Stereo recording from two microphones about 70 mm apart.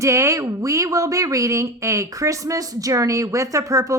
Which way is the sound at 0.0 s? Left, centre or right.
Right.